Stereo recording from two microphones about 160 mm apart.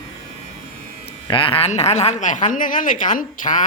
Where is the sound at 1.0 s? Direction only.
35° left (ahead or behind); by 3.7 s 55° left (ahead or behind).